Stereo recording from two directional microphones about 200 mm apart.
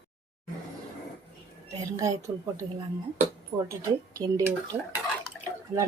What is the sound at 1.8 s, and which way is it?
Dishes, 15° right (ahead or behind).